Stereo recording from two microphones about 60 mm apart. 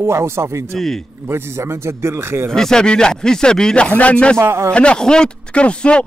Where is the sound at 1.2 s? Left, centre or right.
Right.